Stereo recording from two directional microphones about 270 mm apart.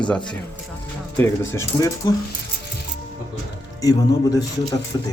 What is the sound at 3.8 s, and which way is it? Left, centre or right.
Speech, centre.